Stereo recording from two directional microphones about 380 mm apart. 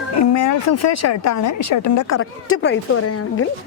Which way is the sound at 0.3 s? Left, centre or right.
Left.